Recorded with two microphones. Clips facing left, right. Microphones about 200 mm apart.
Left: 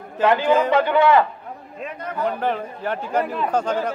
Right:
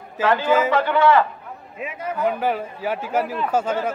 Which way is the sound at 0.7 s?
15° left (ahead or behind).